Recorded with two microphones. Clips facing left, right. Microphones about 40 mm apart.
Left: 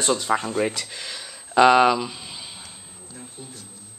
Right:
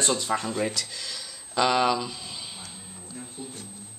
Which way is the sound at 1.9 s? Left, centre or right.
Centre.